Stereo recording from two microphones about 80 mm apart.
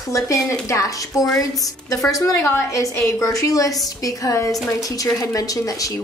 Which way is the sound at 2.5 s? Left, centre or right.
Left.